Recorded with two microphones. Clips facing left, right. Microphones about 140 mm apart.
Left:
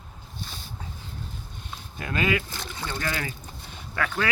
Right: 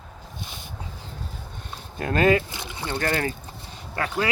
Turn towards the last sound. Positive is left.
turn(degrees=-35)  # may be behind; listen again after turning